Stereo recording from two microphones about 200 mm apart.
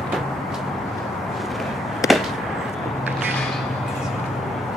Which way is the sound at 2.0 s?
15° left (ahead or behind).